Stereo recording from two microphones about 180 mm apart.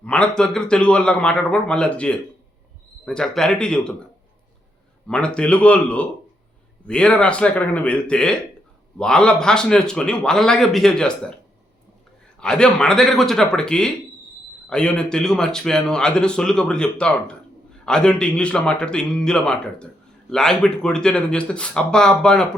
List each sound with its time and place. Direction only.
0.0 s a man's voice: 5° left (ahead or behind)
5.0 s a man's voice: 5° left (ahead or behind)
12.4 s a man's voice: 5° left (ahead or behind)